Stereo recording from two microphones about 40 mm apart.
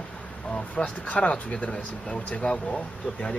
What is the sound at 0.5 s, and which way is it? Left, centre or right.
Speech, left.